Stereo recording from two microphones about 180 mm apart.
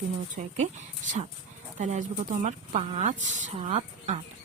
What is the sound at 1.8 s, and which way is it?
A woman's voice, 40° right (ahead or behind).